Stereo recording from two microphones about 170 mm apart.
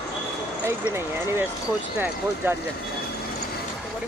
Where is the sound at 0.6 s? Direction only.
15° right (ahead or behind).